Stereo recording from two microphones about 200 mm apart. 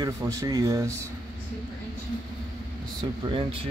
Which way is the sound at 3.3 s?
30° right (ahead or behind).